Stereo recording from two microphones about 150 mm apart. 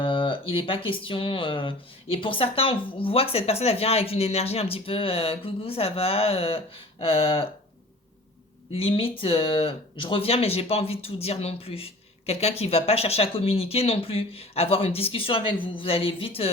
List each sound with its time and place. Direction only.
0.0 s speech: 35° left (ahead or behind)
8.7 s speech: 40° left (ahead or behind)